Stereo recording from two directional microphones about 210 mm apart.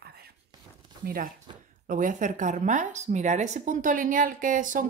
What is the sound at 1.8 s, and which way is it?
A woman's voice, 40° right (ahead or behind).